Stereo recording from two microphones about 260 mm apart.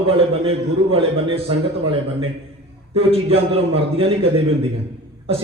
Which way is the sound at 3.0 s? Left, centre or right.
Right.